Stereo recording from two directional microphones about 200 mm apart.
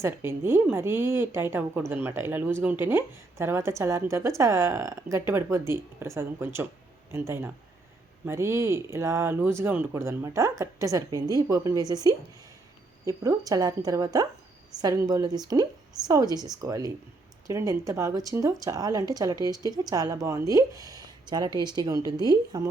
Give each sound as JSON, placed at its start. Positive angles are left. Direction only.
{"t": 0.0, "sound": "a woman's voice", "side_deg": -10}